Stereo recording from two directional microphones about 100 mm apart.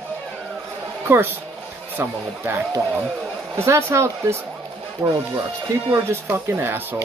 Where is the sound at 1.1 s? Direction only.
20° right (ahead or behind).